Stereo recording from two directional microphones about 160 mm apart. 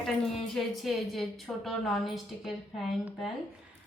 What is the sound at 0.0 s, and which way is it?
A woman's voice, 5° left (ahead or behind).